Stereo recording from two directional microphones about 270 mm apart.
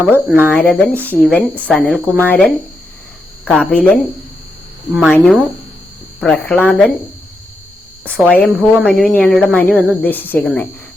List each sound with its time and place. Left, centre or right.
0.1 s speech: centre
0.5 s a woman's voice: centre
4.9 s a woman's voice: centre
8.0 s a woman's voice: centre